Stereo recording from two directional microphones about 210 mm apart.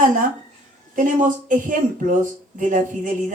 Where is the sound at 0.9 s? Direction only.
40° right (ahead or behind).